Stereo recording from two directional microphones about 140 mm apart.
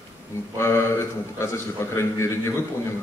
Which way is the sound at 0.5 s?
20° left (ahead or behind).